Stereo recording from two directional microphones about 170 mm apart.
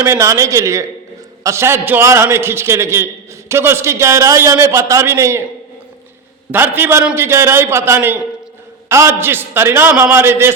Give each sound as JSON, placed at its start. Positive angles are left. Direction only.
{"t": 0.0, "sound": "a man's voice", "side_deg": -15}
{"t": 6.5, "sound": "a man's voice", "side_deg": -10}